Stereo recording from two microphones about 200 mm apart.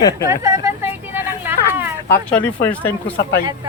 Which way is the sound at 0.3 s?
15° right (ahead or behind).